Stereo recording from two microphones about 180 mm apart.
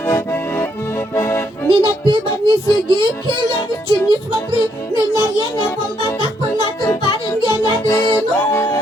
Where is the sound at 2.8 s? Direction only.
25° right (ahead or behind).